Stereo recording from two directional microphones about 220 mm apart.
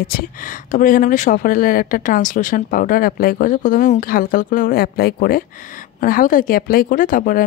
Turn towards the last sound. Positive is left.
turn(degrees=40)  # may be behind; listen again after turning